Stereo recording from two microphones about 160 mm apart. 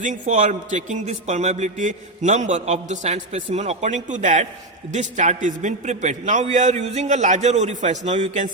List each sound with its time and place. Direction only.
0.0 s a man's voice: 50° right (ahead or behind)